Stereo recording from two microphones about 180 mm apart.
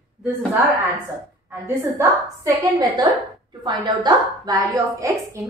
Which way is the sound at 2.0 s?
20° right (ahead or behind).